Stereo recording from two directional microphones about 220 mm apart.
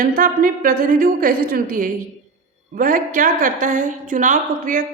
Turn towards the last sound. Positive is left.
turn(degrees=-35)  # may be behind; listen again after turning